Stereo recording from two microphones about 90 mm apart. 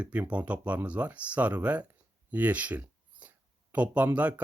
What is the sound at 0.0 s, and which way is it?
Speech, 15° right (ahead or behind).